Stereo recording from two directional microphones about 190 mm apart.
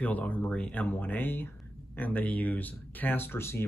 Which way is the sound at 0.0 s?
10° left (ahead or behind).